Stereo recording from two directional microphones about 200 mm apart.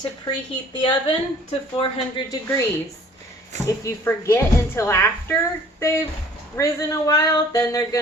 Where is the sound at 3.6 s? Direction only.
15° left (ahead or behind).